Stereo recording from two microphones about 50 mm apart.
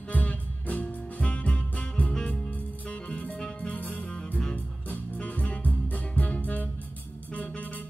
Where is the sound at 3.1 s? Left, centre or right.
Left.